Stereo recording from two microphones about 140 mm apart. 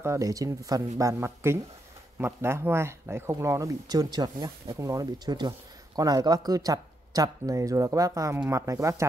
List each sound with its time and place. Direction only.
0.0 s speech: 20° right (ahead or behind)